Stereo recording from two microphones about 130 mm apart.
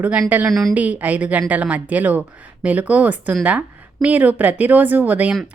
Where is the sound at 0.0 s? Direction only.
10° right (ahead or behind).